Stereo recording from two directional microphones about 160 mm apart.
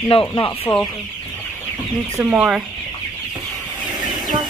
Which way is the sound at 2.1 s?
10° right (ahead or behind).